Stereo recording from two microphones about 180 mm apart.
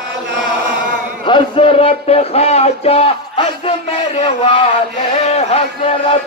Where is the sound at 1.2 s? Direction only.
30° left (ahead or behind).